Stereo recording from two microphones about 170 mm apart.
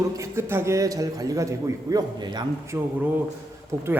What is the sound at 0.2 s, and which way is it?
A man's voice, 15° right (ahead or behind).